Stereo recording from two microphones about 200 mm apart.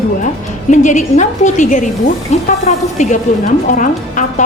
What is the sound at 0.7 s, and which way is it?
A woman's voice, 35° left (ahead or behind).